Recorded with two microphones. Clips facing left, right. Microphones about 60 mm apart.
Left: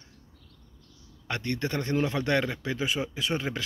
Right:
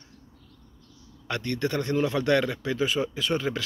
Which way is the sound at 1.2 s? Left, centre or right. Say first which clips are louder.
Right 2 dB; left.